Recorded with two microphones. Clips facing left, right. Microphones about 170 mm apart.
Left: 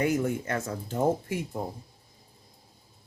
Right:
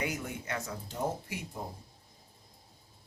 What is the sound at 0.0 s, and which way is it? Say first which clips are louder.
Speech: left 10 dB; 50° left (ahead or behind).